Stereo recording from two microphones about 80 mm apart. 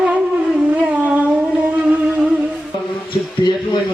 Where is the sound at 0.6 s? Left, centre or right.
Centre.